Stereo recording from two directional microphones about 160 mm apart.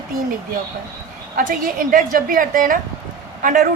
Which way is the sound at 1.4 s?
60° right (ahead or behind).